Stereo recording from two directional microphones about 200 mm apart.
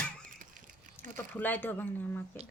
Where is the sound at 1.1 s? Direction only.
10° left (ahead or behind).